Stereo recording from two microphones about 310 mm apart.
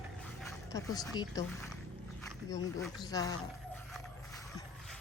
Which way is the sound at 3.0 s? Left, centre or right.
Centre.